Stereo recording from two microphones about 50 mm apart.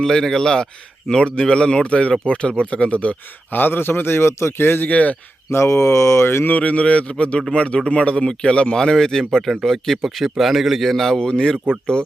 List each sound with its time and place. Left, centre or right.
0.0 s speech: centre; by 3.6 s left
3.6 s a man's voice: left
4.6 s a man's voice: left
4.9 s speech: left
5.5 s speech: left
6.5 s a man's voice: left